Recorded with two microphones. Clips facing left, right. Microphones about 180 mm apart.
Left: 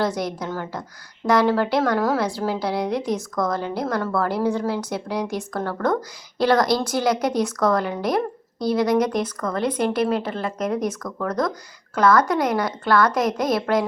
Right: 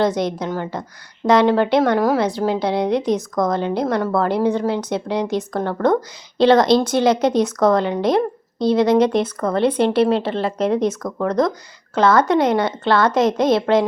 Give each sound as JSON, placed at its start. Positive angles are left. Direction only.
{"t": 0.0, "sound": "a woman's voice", "side_deg": -20}